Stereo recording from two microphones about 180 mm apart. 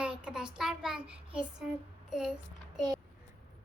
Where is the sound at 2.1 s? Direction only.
5° right (ahead or behind).